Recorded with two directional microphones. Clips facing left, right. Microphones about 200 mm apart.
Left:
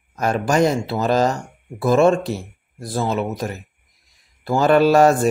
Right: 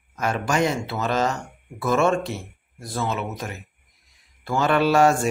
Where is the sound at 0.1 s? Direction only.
40° left (ahead or behind).